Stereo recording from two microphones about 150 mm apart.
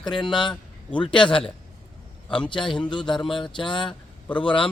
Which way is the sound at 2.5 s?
30° left (ahead or behind).